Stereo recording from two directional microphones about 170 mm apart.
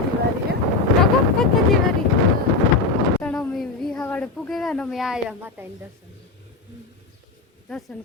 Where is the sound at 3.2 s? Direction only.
5° left (ahead or behind); by 5.7 s 10° right (ahead or behind).